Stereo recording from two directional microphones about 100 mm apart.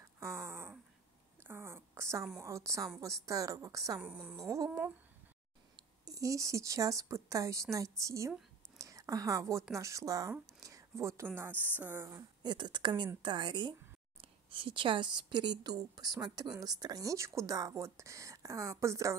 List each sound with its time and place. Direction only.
0.2 s a sound: 25° right (ahead or behind)
2.4 s a woman's voice: 30° right (ahead or behind)
4.0 s a woman's voice: 15° right (ahead or behind)
4.4 s a woman's voice: 35° right (ahead or behind)
6.0 s a woman's voice: 35° right (ahead or behind)
8.7 s a sound: 35° right (ahead or behind)
9.8 s a woman's voice: 30° right (ahead or behind)
10.6 s a sound: 30° right (ahead or behind)
11.3 s speech: 20° right (ahead or behind)
12.4 s a woman's voice: 50° right (ahead or behind); by 19.1 s 30° right (ahead or behind)